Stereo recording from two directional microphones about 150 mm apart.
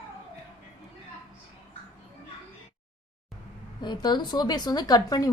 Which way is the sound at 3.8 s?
30° left (ahead or behind).